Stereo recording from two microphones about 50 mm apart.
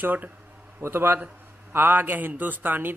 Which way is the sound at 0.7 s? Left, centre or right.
Right.